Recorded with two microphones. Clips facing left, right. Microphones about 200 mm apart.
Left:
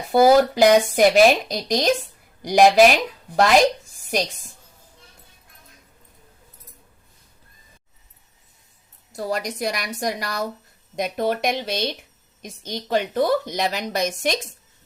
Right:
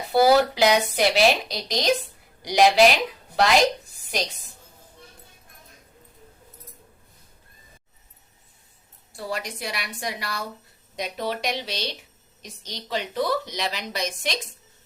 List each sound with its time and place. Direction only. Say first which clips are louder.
0.1 s a woman's voice: left 3 dB; 45° left (ahead or behind)
9.1 s a woman's voice: left 5 dB; 40° left (ahead or behind)